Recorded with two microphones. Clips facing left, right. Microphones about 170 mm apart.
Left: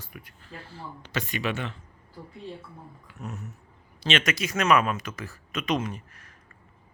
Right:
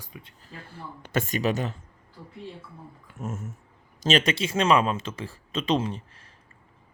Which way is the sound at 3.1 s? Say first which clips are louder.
Right 4 dB; 45° right (ahead or behind).